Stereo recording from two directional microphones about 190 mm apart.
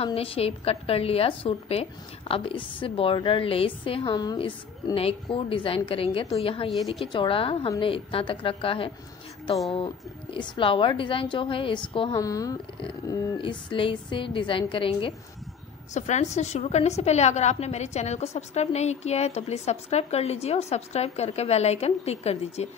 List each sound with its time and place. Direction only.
0.0 s a woman's voice: 30° left (ahead or behind)